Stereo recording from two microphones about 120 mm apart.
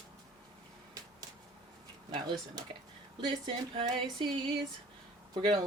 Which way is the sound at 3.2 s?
40° right (ahead or behind).